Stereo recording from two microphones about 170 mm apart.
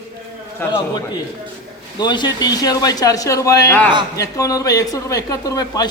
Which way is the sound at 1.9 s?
25° left (ahead or behind).